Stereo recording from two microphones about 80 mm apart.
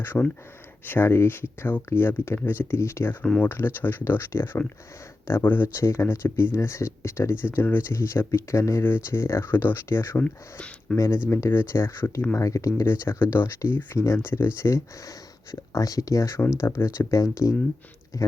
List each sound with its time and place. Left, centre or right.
0.1 s speech: left
5.6 s speech: left
10.2 s speech: centre
10.9 s speech: left
12.4 s speech: left
12.8 s speech: left
15.7 s speech: left